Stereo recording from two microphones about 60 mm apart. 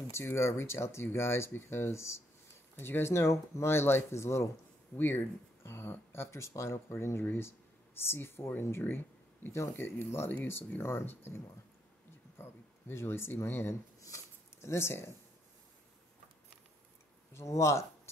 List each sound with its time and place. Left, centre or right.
0.1 s speech: left
4.9 s speech: left
8.8 s a sound: left
9.6 s speech: left
14.0 s a sound: left
17.3 s speech: left